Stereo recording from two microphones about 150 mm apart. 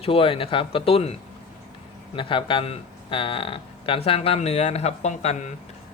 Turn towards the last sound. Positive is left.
turn(degrees=50)  # may be behind; listen again after turning